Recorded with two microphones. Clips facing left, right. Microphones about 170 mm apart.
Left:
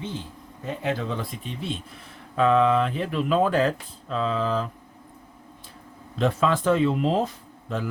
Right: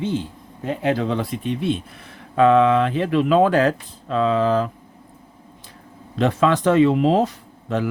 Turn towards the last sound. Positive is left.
turn(degrees=-80)